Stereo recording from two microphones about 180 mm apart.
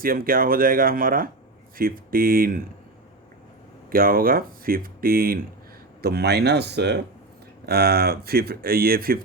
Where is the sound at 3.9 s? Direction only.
55° right (ahead or behind); by 6.9 s 70° right (ahead or behind).